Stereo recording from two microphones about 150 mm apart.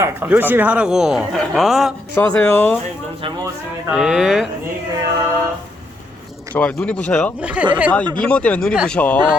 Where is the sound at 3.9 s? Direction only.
5° right (ahead or behind).